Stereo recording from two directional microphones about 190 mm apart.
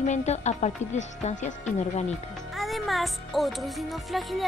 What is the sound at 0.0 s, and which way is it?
A woman's voice, 35° left (ahead or behind).